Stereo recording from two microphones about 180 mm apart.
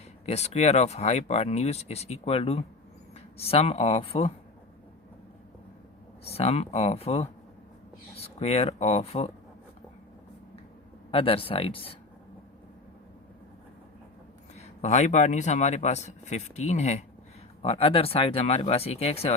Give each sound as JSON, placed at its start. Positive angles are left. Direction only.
{"t": 0.3, "sound": "speech", "side_deg": 35}
{"t": 6.2, "sound": "speech", "side_deg": 35}
{"t": 11.1, "sound": "speech", "side_deg": 30}
{"t": 14.5, "sound": "speech", "side_deg": 40}